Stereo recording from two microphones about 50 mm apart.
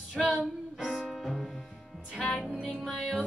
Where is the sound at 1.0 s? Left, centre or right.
Centre.